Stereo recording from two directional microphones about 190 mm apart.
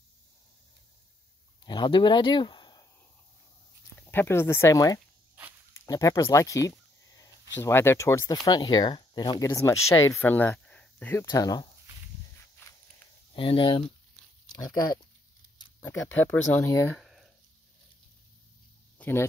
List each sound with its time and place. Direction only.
1.6 s speech: 25° left (ahead or behind)
4.0 s speech: 10° left (ahead or behind)
11.2 s speech: 20° left (ahead or behind)
12.6 s walk: 10° left (ahead or behind)
13.3 s speech: 30° left (ahead or behind); by 17.3 s centre (ahead or behind)
18.9 s speech: 10° left (ahead or behind)